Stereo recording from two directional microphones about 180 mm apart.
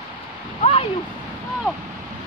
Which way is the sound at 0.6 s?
30° left (ahead or behind).